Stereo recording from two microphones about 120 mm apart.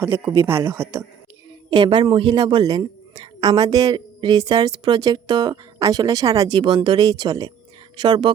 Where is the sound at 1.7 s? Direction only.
40° right (ahead or behind).